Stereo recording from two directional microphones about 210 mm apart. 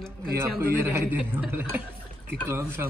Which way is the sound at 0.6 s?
10° right (ahead or behind).